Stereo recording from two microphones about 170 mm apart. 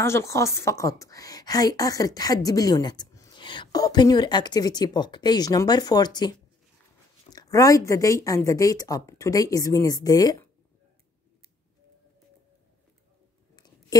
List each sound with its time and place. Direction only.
0.0 s a woman's voice: 15° left (ahead or behind)